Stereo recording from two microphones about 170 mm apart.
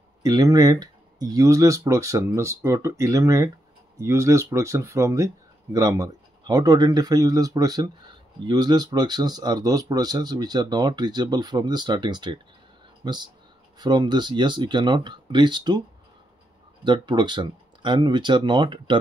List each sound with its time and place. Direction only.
0.2 s speech: 20° right (ahead or behind)
16.8 s speech: 25° right (ahead or behind)